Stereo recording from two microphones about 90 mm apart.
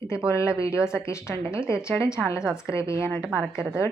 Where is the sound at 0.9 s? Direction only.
30° left (ahead or behind).